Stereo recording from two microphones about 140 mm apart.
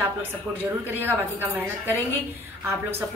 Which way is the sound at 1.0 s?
15° right (ahead or behind).